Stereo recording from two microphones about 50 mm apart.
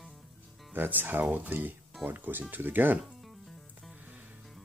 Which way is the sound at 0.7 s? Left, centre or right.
Right.